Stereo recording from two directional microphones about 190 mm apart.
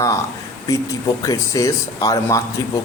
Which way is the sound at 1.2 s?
15° left (ahead or behind).